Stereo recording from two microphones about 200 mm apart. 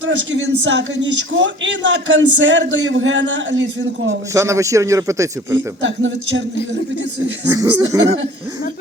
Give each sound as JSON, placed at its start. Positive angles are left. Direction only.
{"t": 0.0, "sound": "a man's voice", "side_deg": -65}
{"t": 4.4, "sound": "a man's voice", "side_deg": -15}
{"t": 5.8, "sound": "a man's voice", "side_deg": -65}
{"t": 7.4, "sound": "a man's voice", "side_deg": -15}